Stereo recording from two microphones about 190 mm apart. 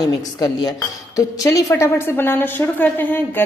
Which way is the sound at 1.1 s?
15° left (ahead or behind).